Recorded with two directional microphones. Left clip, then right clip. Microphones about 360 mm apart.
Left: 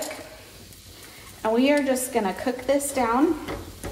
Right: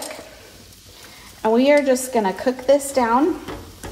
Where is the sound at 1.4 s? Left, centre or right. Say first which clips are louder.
Right 6 dB; right.